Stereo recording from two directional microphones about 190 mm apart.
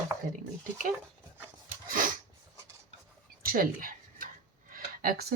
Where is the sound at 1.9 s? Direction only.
45° right (ahead or behind).